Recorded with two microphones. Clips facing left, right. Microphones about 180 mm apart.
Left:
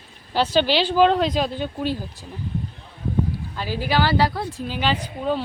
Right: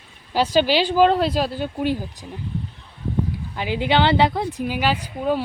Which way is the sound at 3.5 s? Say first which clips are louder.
Right 4 dB; 20° right (ahead or behind).